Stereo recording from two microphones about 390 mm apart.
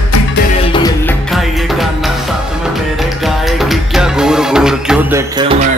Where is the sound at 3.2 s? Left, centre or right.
Centre.